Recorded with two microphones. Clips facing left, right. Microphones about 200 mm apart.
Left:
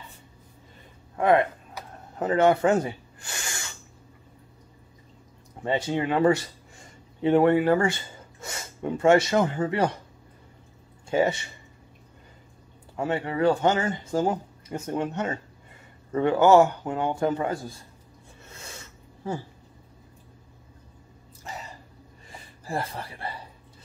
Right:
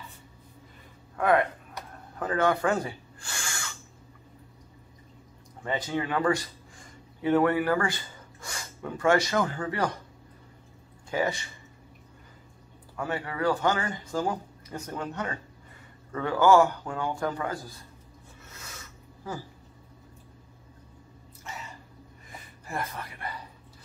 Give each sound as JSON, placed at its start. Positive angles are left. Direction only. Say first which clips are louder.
{"t": 1.1, "sound": "speech", "louder": "left 3 dB", "side_deg": 25}
{"t": 2.1, "sound": "a sound", "louder": "left 5 dB", "side_deg": 25}
{"t": 5.6, "sound": "speech", "louder": "left 4 dB", "side_deg": 25}
{"t": 11.1, "sound": "speech", "louder": "left 5 dB", "side_deg": 25}
{"t": 12.9, "sound": "speech", "louder": "left 5 dB", "side_deg": 25}
{"t": 19.2, "sound": "speech", "louder": "left 5 dB", "side_deg": 25}
{"t": 21.5, "sound": "a sound", "louder": "left 3 dB", "side_deg": 35}
{"t": 22.3, "sound": "speech", "louder": "left 5 dB", "side_deg": 30}